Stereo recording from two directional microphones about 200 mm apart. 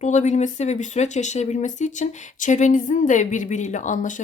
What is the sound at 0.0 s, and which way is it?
Speech, 35° left (ahead or behind).